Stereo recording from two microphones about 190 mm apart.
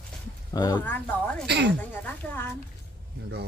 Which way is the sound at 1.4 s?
60° right (ahead or behind).